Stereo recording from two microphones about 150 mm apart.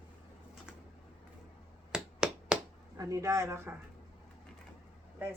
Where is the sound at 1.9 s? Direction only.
5° right (ahead or behind).